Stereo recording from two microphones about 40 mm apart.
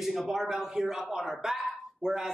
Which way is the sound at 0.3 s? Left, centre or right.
Centre.